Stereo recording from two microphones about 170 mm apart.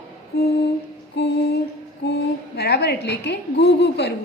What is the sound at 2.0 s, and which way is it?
A woman's voice, 75° left (ahead or behind).